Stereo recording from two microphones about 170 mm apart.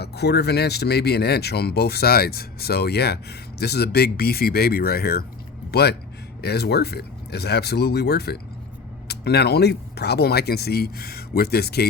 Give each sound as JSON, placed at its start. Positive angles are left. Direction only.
{"t": 0.0, "sound": "speech", "side_deg": 75}